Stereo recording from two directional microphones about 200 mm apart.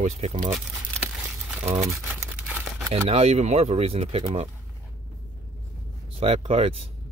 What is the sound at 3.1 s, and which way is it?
Speech, 30° right (ahead or behind).